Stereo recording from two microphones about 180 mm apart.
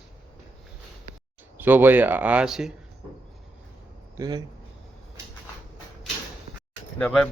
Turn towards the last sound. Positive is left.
turn(degrees=5)  # may be behind; listen again after turning